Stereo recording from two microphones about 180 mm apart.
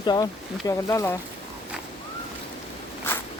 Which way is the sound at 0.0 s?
25° left (ahead or behind).